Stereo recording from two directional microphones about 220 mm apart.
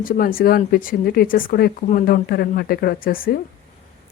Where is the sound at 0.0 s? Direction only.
40° left (ahead or behind).